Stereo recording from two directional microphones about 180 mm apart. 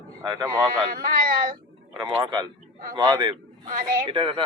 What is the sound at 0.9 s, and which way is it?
Speech, 55° right (ahead or behind).